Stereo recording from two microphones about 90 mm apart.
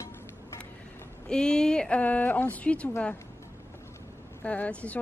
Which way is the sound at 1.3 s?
10° left (ahead or behind).